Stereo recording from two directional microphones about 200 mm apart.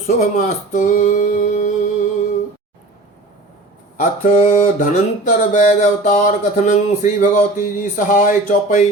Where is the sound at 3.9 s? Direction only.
35° left (ahead or behind).